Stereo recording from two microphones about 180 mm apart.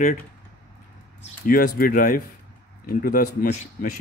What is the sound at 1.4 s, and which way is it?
Speech, 55° left (ahead or behind).